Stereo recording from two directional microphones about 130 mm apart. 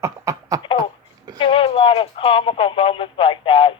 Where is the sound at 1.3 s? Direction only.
40° left (ahead or behind).